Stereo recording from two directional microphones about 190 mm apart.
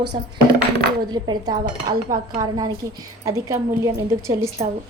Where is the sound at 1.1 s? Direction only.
20° right (ahead or behind).